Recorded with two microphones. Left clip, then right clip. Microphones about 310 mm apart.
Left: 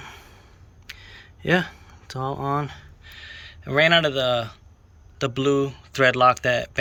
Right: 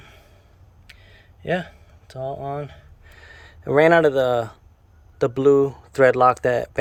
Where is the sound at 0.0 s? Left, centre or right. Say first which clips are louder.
Left 7 dB; centre.